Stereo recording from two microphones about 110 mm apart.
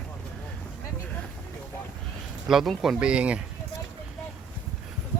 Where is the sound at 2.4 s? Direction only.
5° right (ahead or behind).